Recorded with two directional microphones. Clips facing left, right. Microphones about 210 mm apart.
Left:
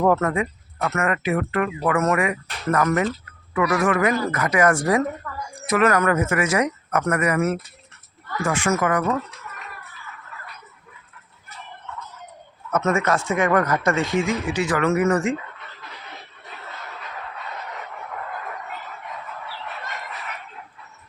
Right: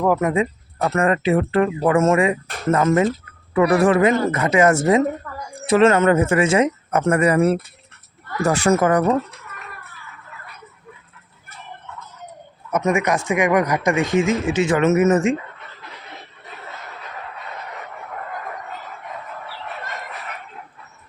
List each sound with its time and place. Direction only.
0.2 s speech: 20° right (ahead or behind)
0.8 s speech: 30° right (ahead or behind)
12.7 s speech: 15° right (ahead or behind)